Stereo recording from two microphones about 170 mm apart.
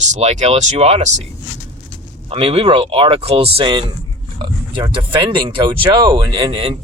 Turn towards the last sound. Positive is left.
turn(degrees=-30)  # may be behind; listen again after turning